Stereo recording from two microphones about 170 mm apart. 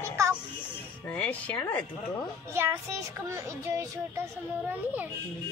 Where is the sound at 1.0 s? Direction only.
10° left (ahead or behind).